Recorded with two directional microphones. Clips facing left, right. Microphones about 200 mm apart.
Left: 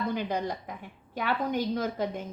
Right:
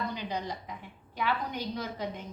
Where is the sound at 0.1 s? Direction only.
50° left (ahead or behind).